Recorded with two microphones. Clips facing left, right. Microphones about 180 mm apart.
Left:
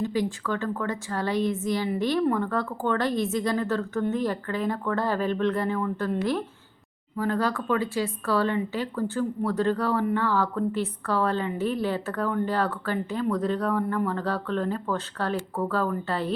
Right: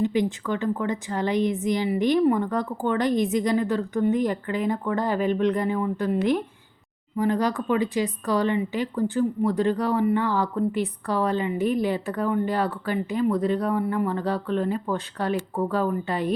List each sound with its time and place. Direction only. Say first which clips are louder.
0.0 s speech: right 3 dB; 20° right (ahead or behind)